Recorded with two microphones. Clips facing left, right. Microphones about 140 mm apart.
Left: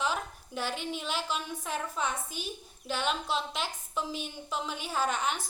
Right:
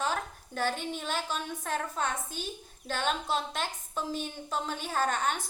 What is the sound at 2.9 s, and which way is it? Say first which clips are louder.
A woman's voice: right 1 dB; 50° right (ahead or behind).